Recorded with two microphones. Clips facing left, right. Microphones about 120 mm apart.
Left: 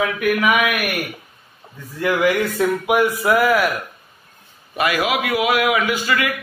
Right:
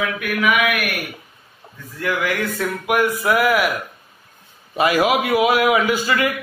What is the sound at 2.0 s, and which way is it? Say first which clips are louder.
Speech: left 5 dB; 20° left (ahead or behind).